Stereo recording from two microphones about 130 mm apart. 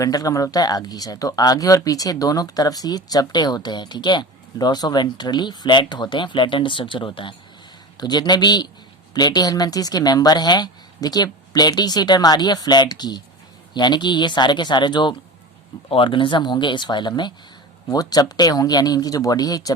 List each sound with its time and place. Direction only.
0.0 s speech: 30° left (ahead or behind)